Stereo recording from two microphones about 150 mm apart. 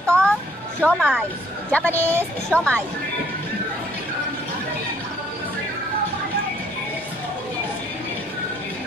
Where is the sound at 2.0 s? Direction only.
15° right (ahead or behind).